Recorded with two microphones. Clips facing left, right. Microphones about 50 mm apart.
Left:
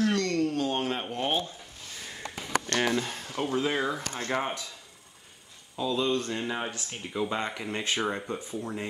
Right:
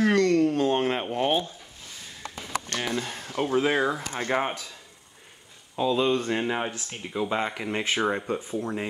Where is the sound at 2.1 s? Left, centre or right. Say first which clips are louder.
Even; left.